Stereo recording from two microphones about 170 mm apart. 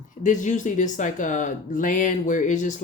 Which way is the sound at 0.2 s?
45° left (ahead or behind).